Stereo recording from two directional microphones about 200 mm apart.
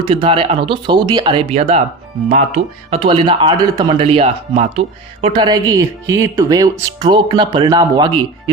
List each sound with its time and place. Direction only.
0.0 s speech: 25° right (ahead or behind)